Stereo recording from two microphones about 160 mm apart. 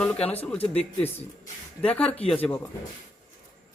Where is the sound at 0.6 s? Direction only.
40° left (ahead or behind).